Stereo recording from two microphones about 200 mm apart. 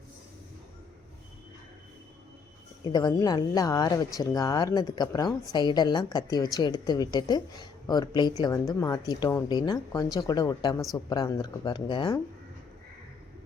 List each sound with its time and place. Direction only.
2.8 s speech: 20° left (ahead or behind)